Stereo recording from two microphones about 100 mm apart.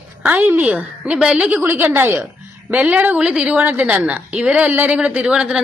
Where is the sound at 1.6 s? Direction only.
20° right (ahead or behind).